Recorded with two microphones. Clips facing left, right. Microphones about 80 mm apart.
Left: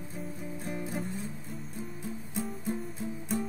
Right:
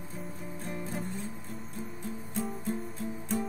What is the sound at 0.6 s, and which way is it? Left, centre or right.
Music, centre.